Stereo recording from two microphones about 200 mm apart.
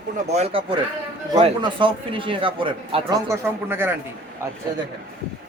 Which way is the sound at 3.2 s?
10° right (ahead or behind).